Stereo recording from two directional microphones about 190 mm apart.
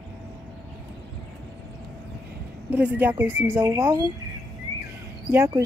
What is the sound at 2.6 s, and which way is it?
A woman's voice, 5° right (ahead or behind).